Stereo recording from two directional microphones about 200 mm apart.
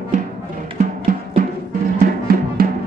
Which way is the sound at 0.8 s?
40° right (ahead or behind).